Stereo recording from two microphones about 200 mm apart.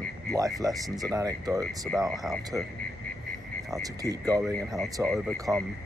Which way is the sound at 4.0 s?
20° right (ahead or behind).